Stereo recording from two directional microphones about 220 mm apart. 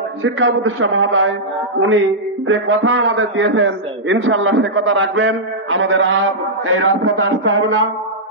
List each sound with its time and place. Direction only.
0.2 s a man's voice: 60° right (ahead or behind)
2.4 s a man's voice: 65° right (ahead or behind)